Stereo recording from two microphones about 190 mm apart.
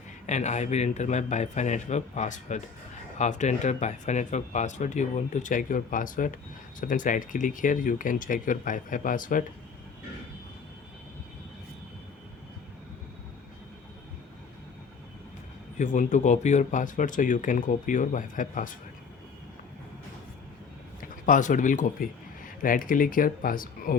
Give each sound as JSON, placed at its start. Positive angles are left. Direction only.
{"t": 0.3, "sound": "speech", "side_deg": 40}
{"t": 15.8, "sound": "speech", "side_deg": 40}
{"t": 21.0, "sound": "speech", "side_deg": 45}